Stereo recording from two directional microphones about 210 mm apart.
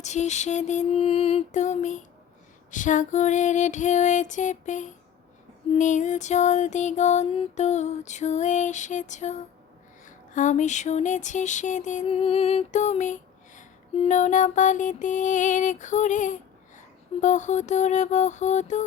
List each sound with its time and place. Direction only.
0.0 s mantra: 35° left (ahead or behind)